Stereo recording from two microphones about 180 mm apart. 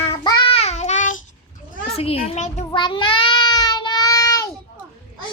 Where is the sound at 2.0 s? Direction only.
35° left (ahead or behind).